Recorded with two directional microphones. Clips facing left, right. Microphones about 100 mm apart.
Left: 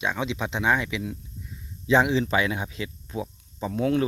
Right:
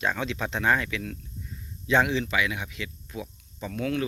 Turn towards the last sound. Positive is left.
turn(degrees=25)  # may be behind; listen again after turning